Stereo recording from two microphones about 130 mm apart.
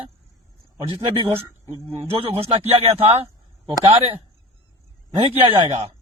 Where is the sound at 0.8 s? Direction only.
45° right (ahead or behind).